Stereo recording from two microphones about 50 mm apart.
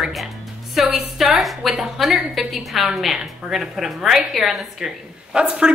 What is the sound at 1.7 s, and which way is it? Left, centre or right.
Speech, centre.